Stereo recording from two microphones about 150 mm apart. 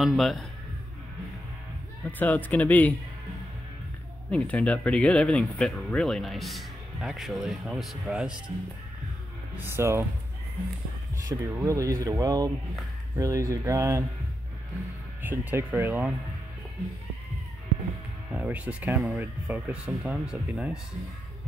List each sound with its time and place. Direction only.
0.0 s speech: centre (ahead or behind)
2.0 s speech: 10° left (ahead or behind)
4.3 s speech: 10° left (ahead or behind)
9.6 s speech: 15° right (ahead or behind)
11.2 s speech: 20° right (ahead or behind)
15.2 s speech: 15° right (ahead or behind)
18.3 s speech: 10° right (ahead or behind)